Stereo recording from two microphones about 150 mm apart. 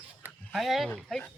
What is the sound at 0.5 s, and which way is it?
Speech, centre (ahead or behind).